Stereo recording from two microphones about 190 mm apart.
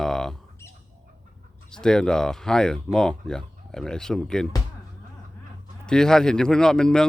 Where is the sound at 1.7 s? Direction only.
5° left (ahead or behind).